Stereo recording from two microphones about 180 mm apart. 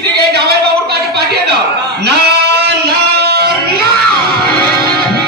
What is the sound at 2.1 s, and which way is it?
Music, 65° right (ahead or behind).